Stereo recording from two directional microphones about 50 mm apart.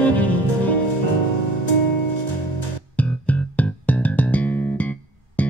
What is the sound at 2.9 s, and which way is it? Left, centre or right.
Music, left.